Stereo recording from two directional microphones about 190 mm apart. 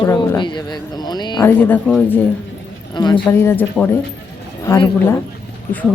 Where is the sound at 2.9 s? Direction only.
25° left (ahead or behind).